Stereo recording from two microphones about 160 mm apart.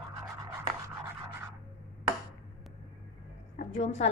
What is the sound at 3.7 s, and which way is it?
Speech, 40° left (ahead or behind).